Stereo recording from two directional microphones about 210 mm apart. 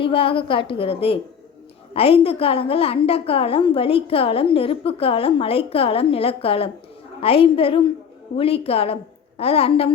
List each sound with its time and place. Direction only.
0.0 s a woman's voice: 25° left (ahead or behind)